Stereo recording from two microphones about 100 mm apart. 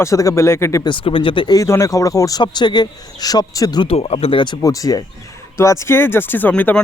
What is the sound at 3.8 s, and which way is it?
Speech, 80° left.